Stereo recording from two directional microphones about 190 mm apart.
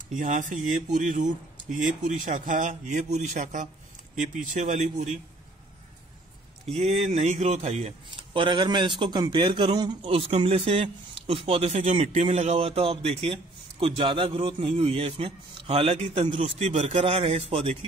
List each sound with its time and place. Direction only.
0.1 s speech: 45° right (ahead or behind)
6.7 s speech: 35° right (ahead or behind)